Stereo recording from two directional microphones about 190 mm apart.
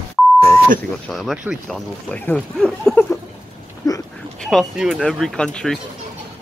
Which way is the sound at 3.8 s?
15° left (ahead or behind).